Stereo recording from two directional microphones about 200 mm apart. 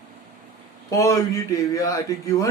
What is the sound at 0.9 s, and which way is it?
Speech, 15° left (ahead or behind).